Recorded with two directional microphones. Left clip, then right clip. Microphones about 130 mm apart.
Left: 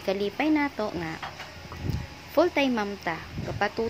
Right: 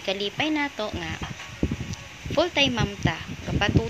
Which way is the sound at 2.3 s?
15° left (ahead or behind).